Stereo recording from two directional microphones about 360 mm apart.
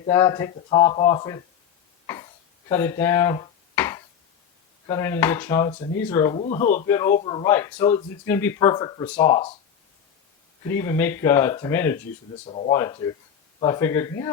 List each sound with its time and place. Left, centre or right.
0.0 s speech: centre
2.6 s a sound: centre
4.9 s speech: centre
6.8 s speech: centre
10.7 s speech: centre
12.5 s speech: centre